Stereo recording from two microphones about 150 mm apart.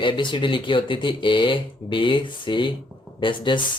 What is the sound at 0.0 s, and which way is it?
Speech, 30° left (ahead or behind).